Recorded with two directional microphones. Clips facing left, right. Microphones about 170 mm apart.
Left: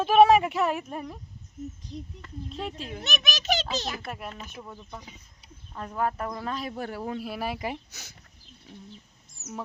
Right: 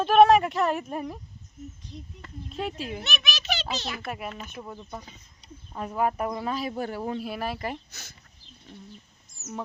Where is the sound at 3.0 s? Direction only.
45° left (ahead or behind).